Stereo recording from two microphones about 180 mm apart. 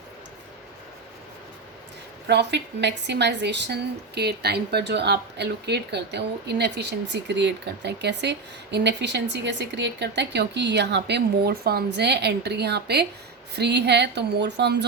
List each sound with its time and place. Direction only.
2.2 s a woman's voice: 70° right (ahead or behind)